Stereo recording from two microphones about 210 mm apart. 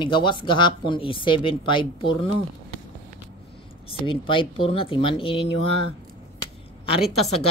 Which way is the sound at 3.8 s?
25° left (ahead or behind).